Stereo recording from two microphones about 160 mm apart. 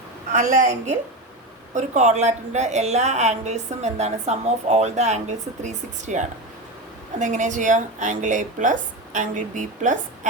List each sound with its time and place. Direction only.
0.3 s a woman's voice: 55° right (ahead or behind)